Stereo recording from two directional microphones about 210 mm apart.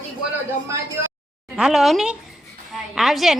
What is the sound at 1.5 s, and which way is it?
A child's voice, centre (ahead or behind).